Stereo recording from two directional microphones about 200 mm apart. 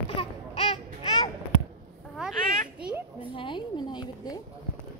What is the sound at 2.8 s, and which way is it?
Children playing, 5° right (ahead or behind).